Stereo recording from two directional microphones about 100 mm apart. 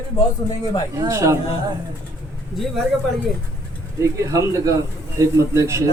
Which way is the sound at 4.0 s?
30° right (ahead or behind).